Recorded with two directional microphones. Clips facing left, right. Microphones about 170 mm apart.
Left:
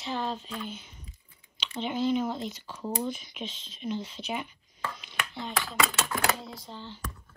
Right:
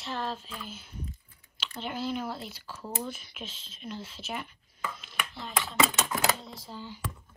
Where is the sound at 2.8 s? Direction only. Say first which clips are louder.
Left 4 dB; 15° left (ahead or behind).